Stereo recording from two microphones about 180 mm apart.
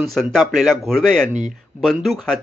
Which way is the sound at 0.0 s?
Centre (ahead or behind).